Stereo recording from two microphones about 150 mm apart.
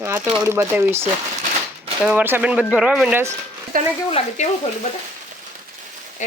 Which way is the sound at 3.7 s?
70° right (ahead or behind).